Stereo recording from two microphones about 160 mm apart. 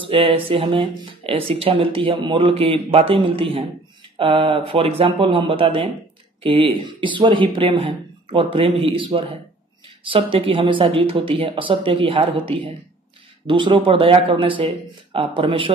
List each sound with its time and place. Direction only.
0.0 s speech: 35° right (ahead or behind)